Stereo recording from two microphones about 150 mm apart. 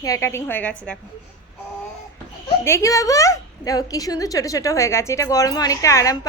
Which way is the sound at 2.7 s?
20° left (ahead or behind).